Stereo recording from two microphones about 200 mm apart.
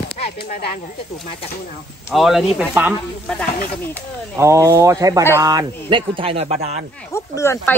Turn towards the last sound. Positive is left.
turn(degrees=10)  # may be behind; listen again after turning